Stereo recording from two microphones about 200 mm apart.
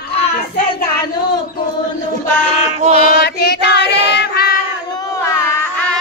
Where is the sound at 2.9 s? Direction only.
50° left (ahead or behind).